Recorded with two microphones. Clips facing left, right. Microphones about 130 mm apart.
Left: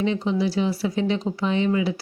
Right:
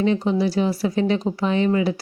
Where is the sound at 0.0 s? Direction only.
50° right (ahead or behind).